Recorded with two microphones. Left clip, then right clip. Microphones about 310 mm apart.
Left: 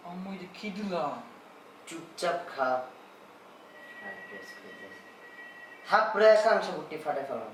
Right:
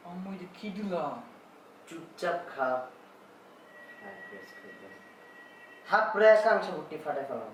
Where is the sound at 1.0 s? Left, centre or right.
Centre.